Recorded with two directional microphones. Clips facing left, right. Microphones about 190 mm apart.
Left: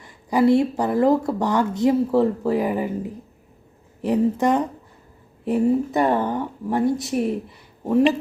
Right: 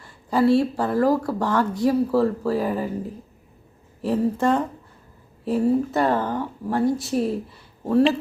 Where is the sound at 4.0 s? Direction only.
20° left (ahead or behind).